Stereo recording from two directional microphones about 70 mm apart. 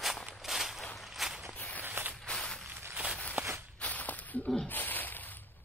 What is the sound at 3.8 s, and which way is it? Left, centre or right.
Whip, left.